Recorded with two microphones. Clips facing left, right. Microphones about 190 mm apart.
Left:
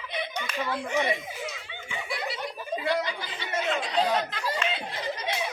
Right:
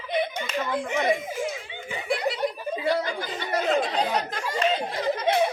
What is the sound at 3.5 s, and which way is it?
Speech, 40° right (ahead or behind).